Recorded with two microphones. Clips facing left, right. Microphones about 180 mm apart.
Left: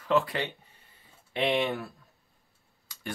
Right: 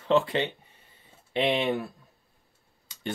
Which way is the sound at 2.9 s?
20° right (ahead or behind).